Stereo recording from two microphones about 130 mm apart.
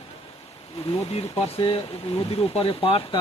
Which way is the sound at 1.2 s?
45° left (ahead or behind).